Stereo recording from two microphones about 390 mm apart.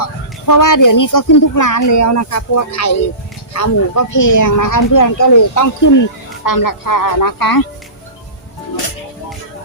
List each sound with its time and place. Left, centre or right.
0.0 s speech: left